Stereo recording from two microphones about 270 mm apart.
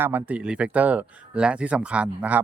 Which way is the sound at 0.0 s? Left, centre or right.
Centre.